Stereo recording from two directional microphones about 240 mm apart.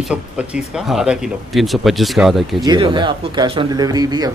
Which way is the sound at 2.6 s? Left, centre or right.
Centre.